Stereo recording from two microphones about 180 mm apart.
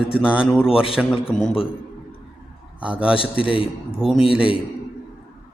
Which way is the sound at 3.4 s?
30° left (ahead or behind).